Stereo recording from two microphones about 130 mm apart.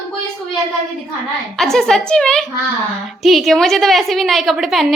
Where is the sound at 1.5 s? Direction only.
5° left (ahead or behind).